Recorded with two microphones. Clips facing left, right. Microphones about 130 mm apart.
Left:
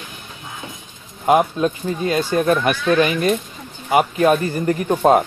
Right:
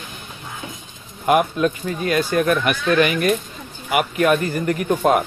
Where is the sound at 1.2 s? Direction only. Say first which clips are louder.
Left 1 dB; 25° left (ahead or behind).